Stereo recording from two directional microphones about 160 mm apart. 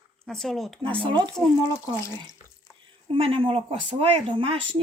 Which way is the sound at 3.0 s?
35° right (ahead or behind).